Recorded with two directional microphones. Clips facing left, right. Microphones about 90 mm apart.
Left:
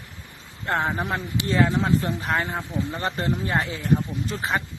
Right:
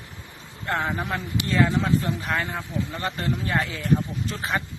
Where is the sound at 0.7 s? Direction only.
30° left (ahead or behind).